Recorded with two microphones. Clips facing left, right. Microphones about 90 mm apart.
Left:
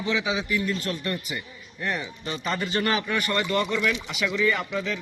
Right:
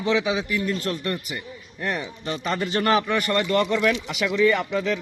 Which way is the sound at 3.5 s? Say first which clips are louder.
Right 5 dB; 55° right (ahead or behind).